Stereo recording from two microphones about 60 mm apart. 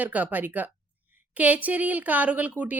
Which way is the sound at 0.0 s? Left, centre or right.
Right.